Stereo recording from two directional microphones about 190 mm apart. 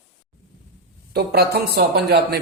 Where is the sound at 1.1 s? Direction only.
55° right (ahead or behind).